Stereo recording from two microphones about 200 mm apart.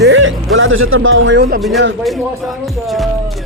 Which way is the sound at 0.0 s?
70° right (ahead or behind).